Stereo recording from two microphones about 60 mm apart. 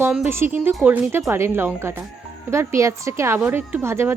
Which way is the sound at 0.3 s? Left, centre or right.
Right.